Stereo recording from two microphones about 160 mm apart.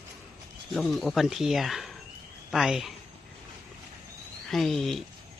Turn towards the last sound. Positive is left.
turn(degrees=0)  # may be behind; listen again after turning